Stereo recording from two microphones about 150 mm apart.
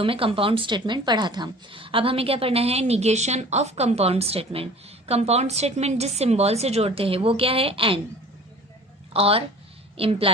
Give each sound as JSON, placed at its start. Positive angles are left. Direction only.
{"t": 0.0, "sound": "a woman's voice", "side_deg": -35}
{"t": 9.1, "sound": "a woman's voice", "side_deg": -40}